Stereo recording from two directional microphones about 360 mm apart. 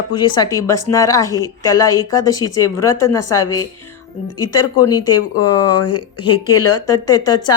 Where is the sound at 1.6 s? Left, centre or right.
Centre.